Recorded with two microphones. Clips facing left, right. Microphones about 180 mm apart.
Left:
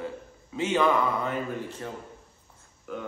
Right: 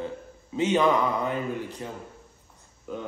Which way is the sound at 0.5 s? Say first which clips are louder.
Right 2 dB; 20° right (ahead or behind).